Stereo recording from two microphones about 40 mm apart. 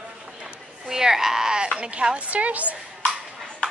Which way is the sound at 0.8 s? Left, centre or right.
Centre.